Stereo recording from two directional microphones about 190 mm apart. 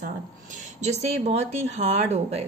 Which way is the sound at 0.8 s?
35° right (ahead or behind).